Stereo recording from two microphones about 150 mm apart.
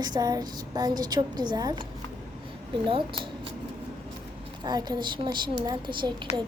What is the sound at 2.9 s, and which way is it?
Speech, 35° right (ahead or behind).